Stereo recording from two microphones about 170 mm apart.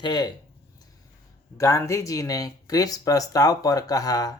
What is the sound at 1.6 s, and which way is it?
Speech, 20° left (ahead or behind).